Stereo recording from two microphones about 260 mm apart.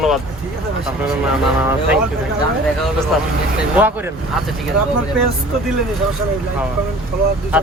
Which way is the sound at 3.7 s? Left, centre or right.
Centre.